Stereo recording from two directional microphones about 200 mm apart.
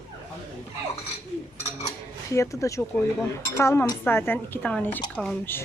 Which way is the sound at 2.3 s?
15° left (ahead or behind).